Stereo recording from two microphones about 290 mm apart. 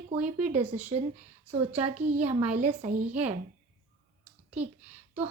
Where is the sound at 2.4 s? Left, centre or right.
Right.